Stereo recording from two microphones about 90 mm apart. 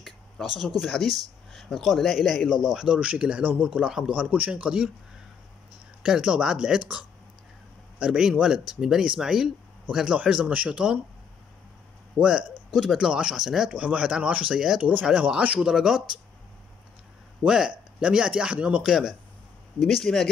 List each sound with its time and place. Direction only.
0.0 s speech: centre (ahead or behind)
6.0 s speech: 10° right (ahead or behind)
8.0 s speech: 10° right (ahead or behind)
12.2 s speech: 10° right (ahead or behind)
14.8 s speech: 20° right (ahead or behind)
17.4 s speech: 10° right (ahead or behind)